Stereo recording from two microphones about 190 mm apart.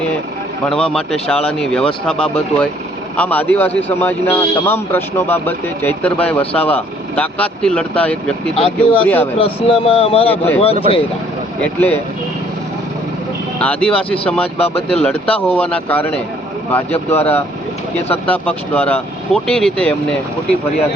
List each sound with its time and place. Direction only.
0.7 s a man's voice: 5° left (ahead or behind)
8.5 s speech: 30° left (ahead or behind)
9.0 s a man's voice: 10° left (ahead or behind)
9.4 s speech: 30° left (ahead or behind)
11.6 s a man's voice: 10° left (ahead or behind)
13.6 s a man's voice: 5° left (ahead or behind)
14.6 s speech: 30° left (ahead or behind)
15.0 s a man's voice: 10° left (ahead or behind)
18.3 s a man's voice: 10° left (ahead or behind)